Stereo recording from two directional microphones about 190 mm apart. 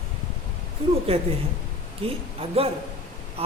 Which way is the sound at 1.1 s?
30° right (ahead or behind).